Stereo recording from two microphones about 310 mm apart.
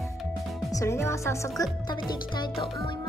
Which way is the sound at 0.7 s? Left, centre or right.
Centre.